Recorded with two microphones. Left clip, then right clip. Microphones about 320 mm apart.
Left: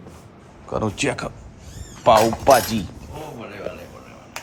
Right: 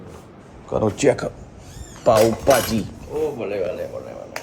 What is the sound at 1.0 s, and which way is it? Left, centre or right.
Speech, centre.